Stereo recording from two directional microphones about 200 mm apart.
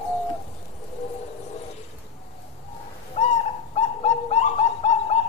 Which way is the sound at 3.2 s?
35° left (ahead or behind).